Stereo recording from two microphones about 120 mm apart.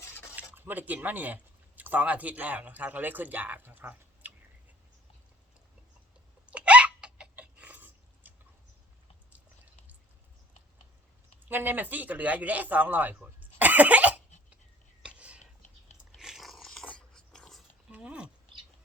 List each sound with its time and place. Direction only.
0.0 s a sound: 20° left (ahead or behind)
0.5 s speech: 15° right (ahead or behind)
6.4 s chicken: 10° right (ahead or behind)
11.4 s speech: 15° right (ahead or behind)
15.0 s whispering: 10° right (ahead or behind)
16.1 s dog: centre (ahead or behind)
17.9 s a sound: 10° right (ahead or behind)